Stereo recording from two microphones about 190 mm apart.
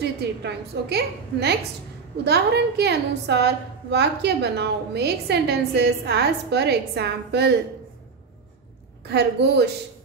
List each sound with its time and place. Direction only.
0.0 s a woman's voice: 60° right (ahead or behind)
9.1 s a woman's voice: 60° right (ahead or behind)